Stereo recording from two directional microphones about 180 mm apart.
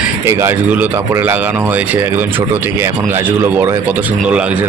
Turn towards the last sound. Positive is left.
turn(degrees=-5)  # may be behind; listen again after turning